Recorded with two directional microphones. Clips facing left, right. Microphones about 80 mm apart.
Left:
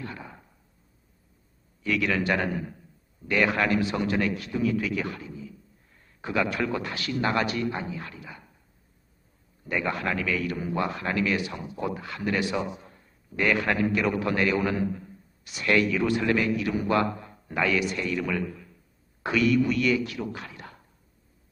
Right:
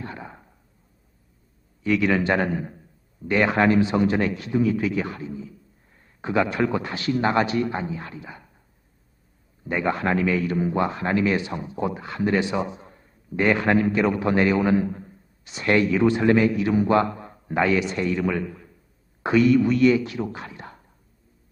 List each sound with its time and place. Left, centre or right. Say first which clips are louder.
0.0 s a sound: right 3 dB; right
1.8 s speech: right 5 dB; right
9.6 s speech: right 5 dB; right